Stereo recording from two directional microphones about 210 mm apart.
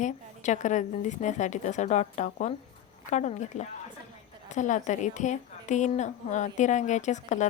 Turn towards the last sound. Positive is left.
turn(degrees=35)  # may be behind; listen again after turning